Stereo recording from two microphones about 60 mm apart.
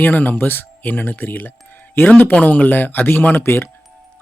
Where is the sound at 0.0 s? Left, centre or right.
Left.